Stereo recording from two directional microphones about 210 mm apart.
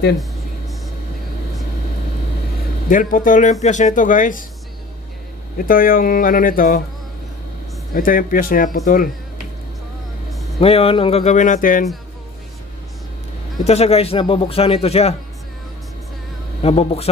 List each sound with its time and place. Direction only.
2.9 s speech: 40° left (ahead or behind)
5.6 s speech: 40° left (ahead or behind)
7.9 s speech: 40° left (ahead or behind)
10.6 s a man's voice: 25° left (ahead or behind)
13.7 s a man's voice: 30° left (ahead or behind)
16.6 s a man's voice: 30° left (ahead or behind)